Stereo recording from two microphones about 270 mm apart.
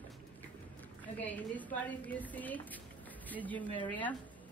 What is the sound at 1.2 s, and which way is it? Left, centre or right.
A woman's voice, centre.